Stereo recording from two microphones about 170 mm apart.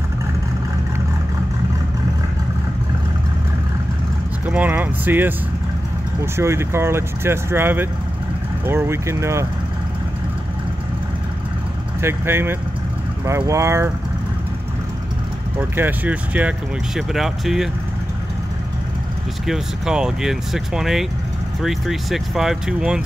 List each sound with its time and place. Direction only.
4.5 s speech: 10° right (ahead or behind)
6.3 s speech: 15° right (ahead or behind)
12.0 s speech: 15° right (ahead or behind)
15.7 s speech: 10° right (ahead or behind)
19.4 s speech: 5° right (ahead or behind)